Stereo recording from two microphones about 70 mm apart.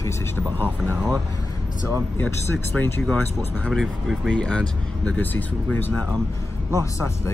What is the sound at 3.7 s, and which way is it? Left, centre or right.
Speech, centre.